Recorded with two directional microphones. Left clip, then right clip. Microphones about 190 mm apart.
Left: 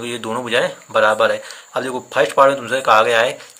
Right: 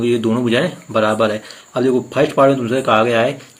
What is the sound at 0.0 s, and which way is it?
Speech, 25° left (ahead or behind).